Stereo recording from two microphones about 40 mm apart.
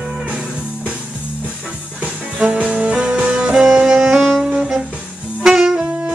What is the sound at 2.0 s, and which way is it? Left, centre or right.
Music, right.